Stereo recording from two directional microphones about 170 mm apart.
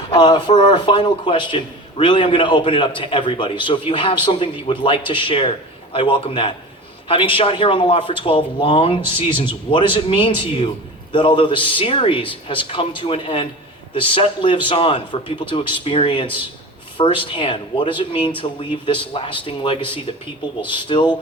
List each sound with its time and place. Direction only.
0.1 s a man's voice: 25° left (ahead or behind)